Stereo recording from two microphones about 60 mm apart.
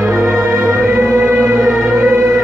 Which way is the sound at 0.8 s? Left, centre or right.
Right.